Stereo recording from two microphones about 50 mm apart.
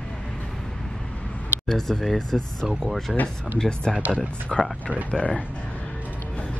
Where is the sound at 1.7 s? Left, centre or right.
Centre.